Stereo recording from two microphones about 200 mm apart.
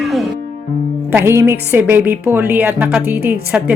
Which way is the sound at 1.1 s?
10° right (ahead or behind).